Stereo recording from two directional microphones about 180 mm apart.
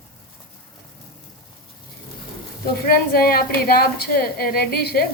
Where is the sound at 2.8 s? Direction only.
55° left (ahead or behind).